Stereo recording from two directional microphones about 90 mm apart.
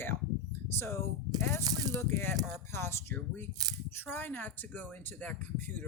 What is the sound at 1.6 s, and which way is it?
Speech, 45° right (ahead or behind).